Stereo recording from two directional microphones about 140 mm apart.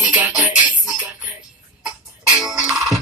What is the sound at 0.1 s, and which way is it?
Music, 10° right (ahead or behind).